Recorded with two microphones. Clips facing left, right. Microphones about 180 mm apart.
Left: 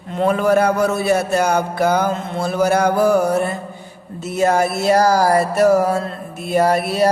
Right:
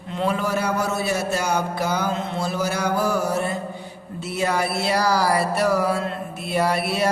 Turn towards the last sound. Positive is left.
turn(degrees=40)  # may be behind; listen again after turning